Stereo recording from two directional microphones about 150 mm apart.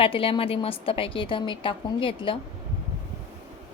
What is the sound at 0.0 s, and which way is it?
A woman's voice, 35° left (ahead or behind).